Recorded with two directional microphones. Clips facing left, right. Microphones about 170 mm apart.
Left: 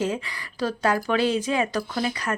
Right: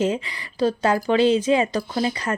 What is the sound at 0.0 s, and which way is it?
A woman's voice, 20° right (ahead or behind).